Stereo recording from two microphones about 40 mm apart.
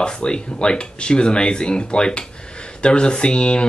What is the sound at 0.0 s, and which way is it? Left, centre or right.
Speech, left.